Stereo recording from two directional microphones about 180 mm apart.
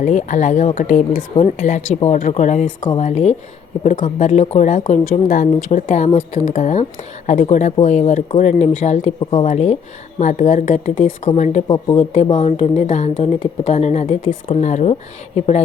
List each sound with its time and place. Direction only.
0.0 s a woman's voice: 40° left (ahead or behind)
11.7 s speech: 25° left (ahead or behind)
12.1 s a woman's voice: 35° left (ahead or behind)